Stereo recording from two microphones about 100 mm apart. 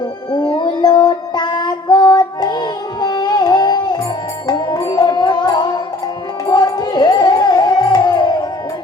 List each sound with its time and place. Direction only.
0.3 s child singing: 55° left (ahead or behind)
4.4 s music: 40° left (ahead or behind)